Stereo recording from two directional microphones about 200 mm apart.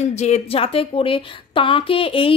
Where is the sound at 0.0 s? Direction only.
35° left (ahead or behind).